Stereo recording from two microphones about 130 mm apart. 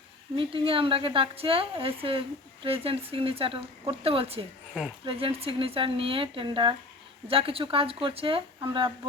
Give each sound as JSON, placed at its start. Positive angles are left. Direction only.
{"t": 0.3, "sound": "a woman's voice", "side_deg": -45}